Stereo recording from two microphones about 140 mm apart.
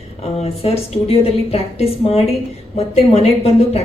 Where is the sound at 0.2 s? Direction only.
45° left (ahead or behind).